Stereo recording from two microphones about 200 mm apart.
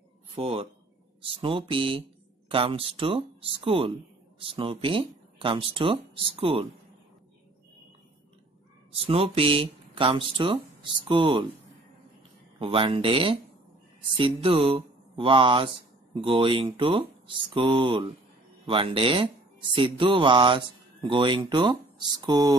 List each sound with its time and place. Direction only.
0.4 s speech: 30° right (ahead or behind)
9.0 s speech: 30° right (ahead or behind)
12.5 s speech: 25° right (ahead or behind)